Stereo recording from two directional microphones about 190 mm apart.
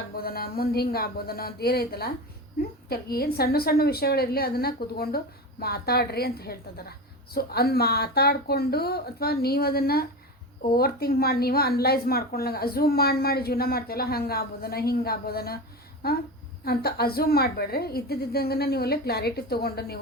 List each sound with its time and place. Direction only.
0.1 s a woman's voice: 55° left (ahead or behind)